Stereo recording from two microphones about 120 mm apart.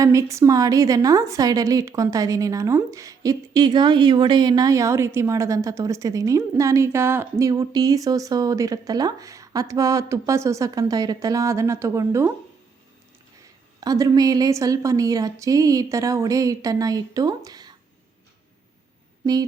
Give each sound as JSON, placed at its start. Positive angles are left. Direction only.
{"t": 0.0, "sound": "a woman's voice", "side_deg": -25}
{"t": 13.7, "sound": "a woman's voice", "side_deg": -30}
{"t": 19.2, "sound": "a sound", "side_deg": -35}